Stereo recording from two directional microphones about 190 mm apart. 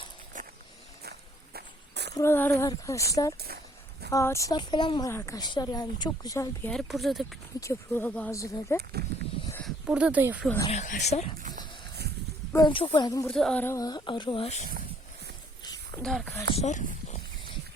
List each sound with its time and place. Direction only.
0.4 s walk: 45° right (ahead or behind)
1.5 s walk: 60° right (ahead or behind)
2.1 s speech: 10° left (ahead or behind)
7.6 s speech: 15° left (ahead or behind)
8.8 s speech: 55° right (ahead or behind)
9.6 s speech: 5° right (ahead or behind)
10.7 s speech: 40° left (ahead or behind)
12.5 s speech: 25° left (ahead or behind)
13.2 s speech: 5° left (ahead or behind); by 14.7 s 35° left (ahead or behind)
16.0 s speech: centre (ahead or behind)
16.6 s speech: 35° left (ahead or behind)